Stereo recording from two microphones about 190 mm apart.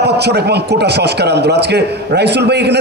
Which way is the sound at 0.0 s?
60° right (ahead or behind).